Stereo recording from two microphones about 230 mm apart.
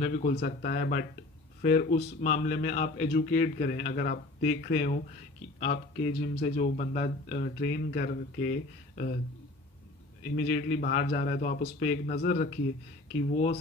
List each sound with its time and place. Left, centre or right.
0.0 s speech: left
10.3 s speech: left